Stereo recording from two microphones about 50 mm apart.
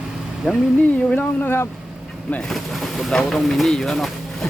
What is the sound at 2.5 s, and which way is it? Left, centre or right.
Speech, centre.